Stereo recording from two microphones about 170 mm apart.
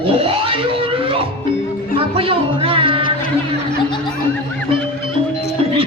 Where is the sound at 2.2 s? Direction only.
35° right (ahead or behind).